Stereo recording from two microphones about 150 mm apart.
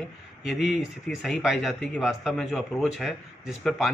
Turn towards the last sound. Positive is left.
turn(degrees=0)  # may be behind; listen again after turning